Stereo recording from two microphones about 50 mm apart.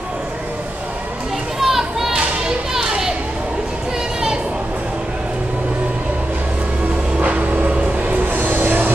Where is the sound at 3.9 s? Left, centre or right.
Centre.